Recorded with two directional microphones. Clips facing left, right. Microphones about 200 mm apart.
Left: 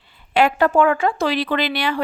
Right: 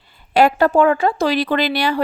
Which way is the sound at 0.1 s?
40° right (ahead or behind).